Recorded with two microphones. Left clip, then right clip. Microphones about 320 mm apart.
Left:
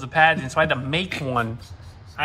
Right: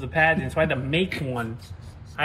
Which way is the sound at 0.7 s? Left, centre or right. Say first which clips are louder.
Left 1 dB; left.